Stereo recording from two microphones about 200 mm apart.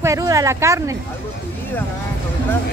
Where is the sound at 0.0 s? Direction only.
15° right (ahead or behind).